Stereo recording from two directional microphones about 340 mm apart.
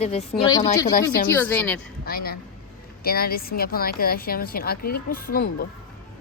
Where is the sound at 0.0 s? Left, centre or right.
Centre.